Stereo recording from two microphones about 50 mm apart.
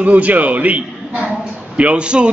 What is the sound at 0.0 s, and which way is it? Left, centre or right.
A man's voice, right.